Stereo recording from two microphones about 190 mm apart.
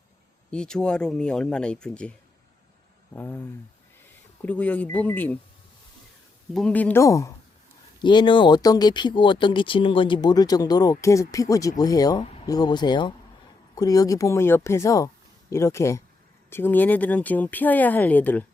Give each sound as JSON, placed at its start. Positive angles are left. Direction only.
{"t": 0.5, "sound": "speech", "side_deg": 5}
{"t": 4.4, "sound": "speech", "side_deg": 10}
{"t": 6.5, "sound": "speech", "side_deg": 5}